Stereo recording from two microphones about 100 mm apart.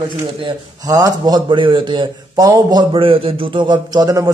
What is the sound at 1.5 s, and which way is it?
A man's voice, 55° right (ahead or behind).